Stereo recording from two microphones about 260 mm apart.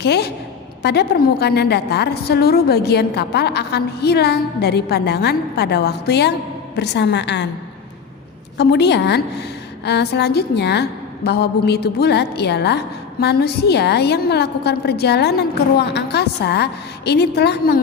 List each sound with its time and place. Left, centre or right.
0.0 s a woman's voice: left
8.5 s a woman's voice: left